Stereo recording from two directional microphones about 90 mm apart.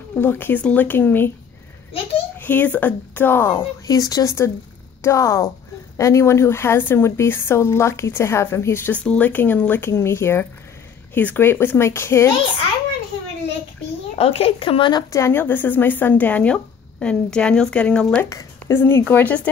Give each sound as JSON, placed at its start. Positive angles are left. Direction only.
{"t": 0.2, "sound": "a woman's voice", "side_deg": 25}
{"t": 2.3, "sound": "a woman's voice", "side_deg": 20}
{"t": 3.8, "sound": "a woman's voice", "side_deg": 40}
{"t": 9.0, "sound": "a woman's voice", "side_deg": 15}
{"t": 14.1, "sound": "speech", "side_deg": 90}
{"t": 15.1, "sound": "speech", "side_deg": 25}
{"t": 18.7, "sound": "a woman's voice", "side_deg": 25}